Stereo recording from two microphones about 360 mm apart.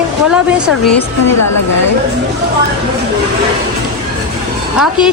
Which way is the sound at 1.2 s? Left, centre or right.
Left.